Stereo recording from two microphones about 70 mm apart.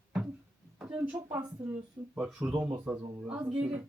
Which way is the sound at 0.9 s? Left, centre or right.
Right.